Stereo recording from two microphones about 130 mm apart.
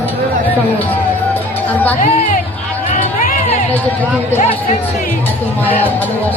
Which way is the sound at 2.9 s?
90° left.